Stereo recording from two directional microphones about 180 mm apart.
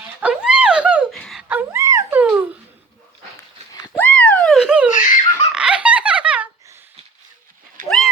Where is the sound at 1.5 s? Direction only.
10° right (ahead or behind).